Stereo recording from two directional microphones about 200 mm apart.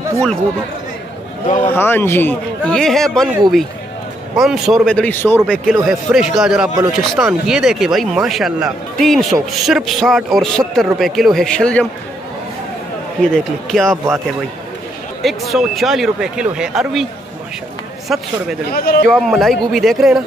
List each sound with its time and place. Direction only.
1.7 s speech: 10° left (ahead or behind)
13.2 s speech: centre (ahead or behind)
15.5 s speech: centre (ahead or behind)
18.0 s speech: centre (ahead or behind)
18.7 s a man's voice: 55° left (ahead or behind)
19.0 s speech: centre (ahead or behind)